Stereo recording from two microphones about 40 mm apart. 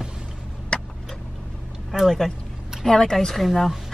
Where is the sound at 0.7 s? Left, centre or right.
Left.